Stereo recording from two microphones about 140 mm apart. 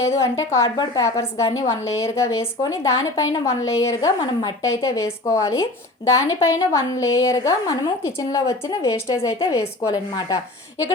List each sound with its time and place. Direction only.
0.2 s a woman's voice: 20° left (ahead or behind)